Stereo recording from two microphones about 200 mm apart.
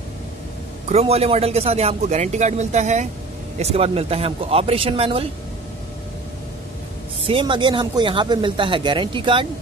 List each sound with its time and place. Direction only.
0.8 s speech: 30° right (ahead or behind)
7.2 s speech: 25° right (ahead or behind)